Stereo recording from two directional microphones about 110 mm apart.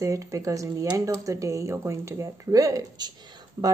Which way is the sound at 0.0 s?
30° right (ahead or behind).